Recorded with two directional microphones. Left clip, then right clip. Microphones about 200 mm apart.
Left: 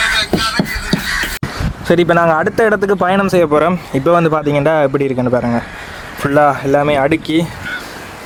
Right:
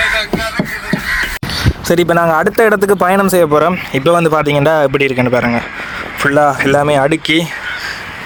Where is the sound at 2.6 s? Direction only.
35° right (ahead or behind).